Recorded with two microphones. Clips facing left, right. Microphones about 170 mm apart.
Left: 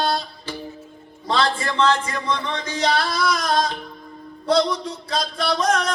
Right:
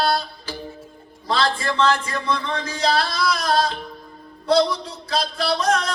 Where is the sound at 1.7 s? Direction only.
30° left (ahead or behind).